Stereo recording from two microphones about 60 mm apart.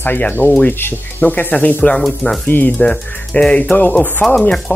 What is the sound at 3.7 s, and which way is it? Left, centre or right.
Speech, left.